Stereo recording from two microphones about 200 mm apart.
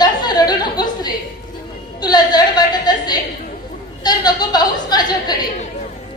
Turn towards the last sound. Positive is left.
turn(degrees=20)  # may be behind; listen again after turning